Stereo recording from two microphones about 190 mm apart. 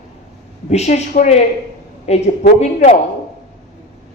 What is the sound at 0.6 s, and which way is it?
A man's voice, 35° left (ahead or behind).